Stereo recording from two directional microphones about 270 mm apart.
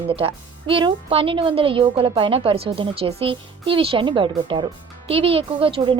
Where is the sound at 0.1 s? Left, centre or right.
Centre.